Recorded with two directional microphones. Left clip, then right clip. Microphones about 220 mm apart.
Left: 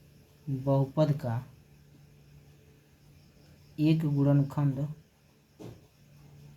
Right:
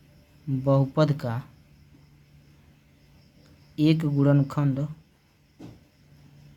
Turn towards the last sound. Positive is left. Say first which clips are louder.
# right 5 dB
turn(degrees=-35)  # may be behind; listen again after turning